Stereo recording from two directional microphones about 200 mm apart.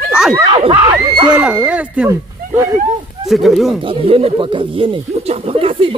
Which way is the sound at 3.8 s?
25° right (ahead or behind).